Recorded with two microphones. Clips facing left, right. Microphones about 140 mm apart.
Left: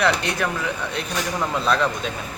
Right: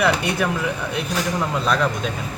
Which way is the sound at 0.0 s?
5° right (ahead or behind).